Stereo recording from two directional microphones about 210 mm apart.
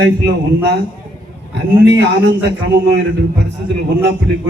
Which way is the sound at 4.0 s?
55° right (ahead or behind).